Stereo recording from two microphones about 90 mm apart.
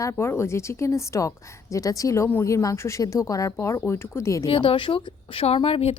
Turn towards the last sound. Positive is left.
turn(degrees=75)  # may be behind; listen again after turning